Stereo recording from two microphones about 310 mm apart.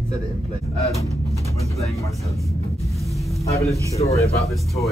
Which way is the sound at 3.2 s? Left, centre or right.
Centre.